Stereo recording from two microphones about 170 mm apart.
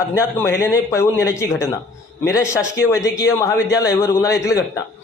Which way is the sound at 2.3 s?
15° left (ahead or behind).